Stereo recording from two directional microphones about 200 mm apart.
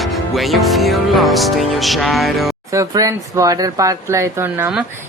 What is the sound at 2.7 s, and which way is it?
Speech, 15° right (ahead or behind).